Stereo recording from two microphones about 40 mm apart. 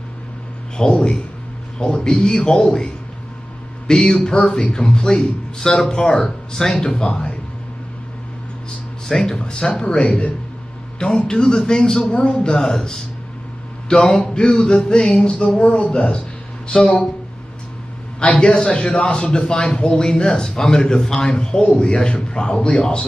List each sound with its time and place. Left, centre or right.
0.7 s a man's voice: centre
6.2 s speech: centre
6.7 s speech: centre
9.0 s a man's voice: centre
9.8 s a man's voice: left
12.1 s speech: left
12.5 s speech: centre
14.2 s a sound: left
14.5 s a man's voice: centre
18.2 s a man's voice: left